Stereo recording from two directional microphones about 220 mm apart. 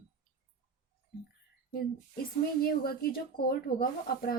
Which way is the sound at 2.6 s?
45° left (ahead or behind).